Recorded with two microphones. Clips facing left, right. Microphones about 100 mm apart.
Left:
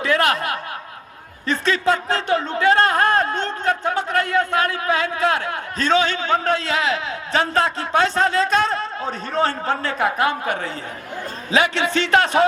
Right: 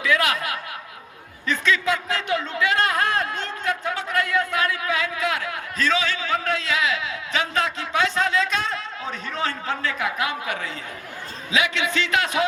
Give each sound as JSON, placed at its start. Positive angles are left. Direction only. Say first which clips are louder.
{"t": 0.0, "sound": "speech", "louder": "left 3 dB", "side_deg": 40}